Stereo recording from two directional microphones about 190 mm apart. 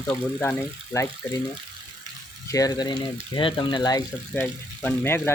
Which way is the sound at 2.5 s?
20° left (ahead or behind).